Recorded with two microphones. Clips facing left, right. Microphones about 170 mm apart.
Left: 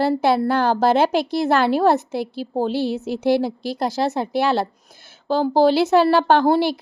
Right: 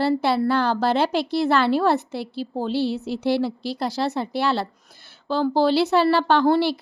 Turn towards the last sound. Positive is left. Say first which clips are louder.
# left 3 dB
turn(degrees=45)  # may be behind; listen again after turning